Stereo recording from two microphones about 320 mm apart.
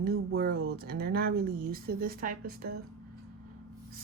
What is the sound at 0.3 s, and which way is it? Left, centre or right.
Speech, right.